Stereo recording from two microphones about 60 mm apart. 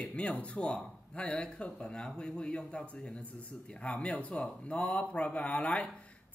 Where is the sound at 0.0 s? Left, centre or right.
Centre.